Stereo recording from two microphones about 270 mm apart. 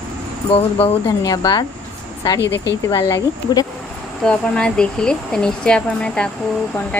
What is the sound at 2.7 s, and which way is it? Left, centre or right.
Speech, centre.